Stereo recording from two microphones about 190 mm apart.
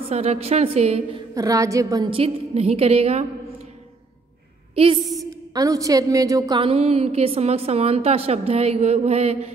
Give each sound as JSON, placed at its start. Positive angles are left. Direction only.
{"t": 0.1, "sound": "a woman's voice", "side_deg": -35}
{"t": 1.3, "sound": "a woman's voice", "side_deg": -20}
{"t": 4.7, "sound": "a woman's voice", "side_deg": -30}
{"t": 5.5, "sound": "a woman's voice", "side_deg": -20}